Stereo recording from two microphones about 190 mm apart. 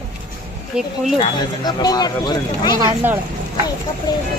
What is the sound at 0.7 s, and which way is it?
Speech, 5° right (ahead or behind).